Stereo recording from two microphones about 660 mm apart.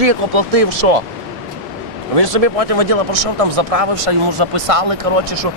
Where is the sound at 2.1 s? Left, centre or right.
Right.